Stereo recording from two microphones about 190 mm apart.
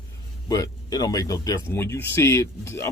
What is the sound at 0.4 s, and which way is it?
Speech, 20° left (ahead or behind).